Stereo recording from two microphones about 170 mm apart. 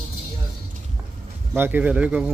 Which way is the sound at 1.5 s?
10° right (ahead or behind).